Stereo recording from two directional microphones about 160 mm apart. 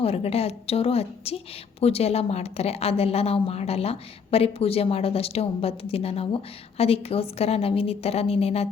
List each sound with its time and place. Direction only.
0.0 s a woman's voice: 40° left (ahead or behind)